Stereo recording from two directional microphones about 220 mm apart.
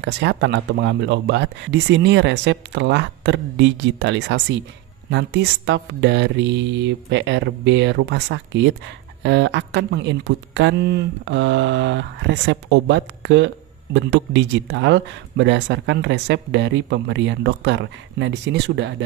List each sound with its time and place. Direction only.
0.0 s speech: 50° right (ahead or behind)